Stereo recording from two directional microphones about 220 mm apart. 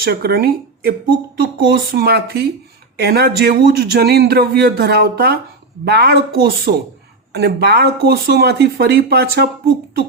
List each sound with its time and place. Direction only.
0.0 s a man's voice: 45° right (ahead or behind)